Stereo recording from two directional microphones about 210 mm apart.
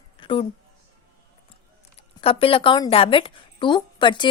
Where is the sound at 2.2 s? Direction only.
25° left (ahead or behind).